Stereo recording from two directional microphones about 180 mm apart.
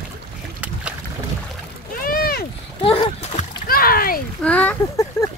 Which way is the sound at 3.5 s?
55° left (ahead or behind).